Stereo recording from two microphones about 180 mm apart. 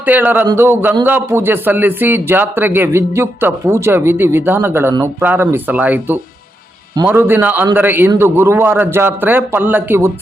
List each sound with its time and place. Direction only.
0.0 s speech: 10° right (ahead or behind)